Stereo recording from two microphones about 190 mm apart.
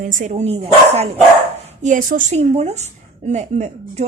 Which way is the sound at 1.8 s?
45° right (ahead or behind).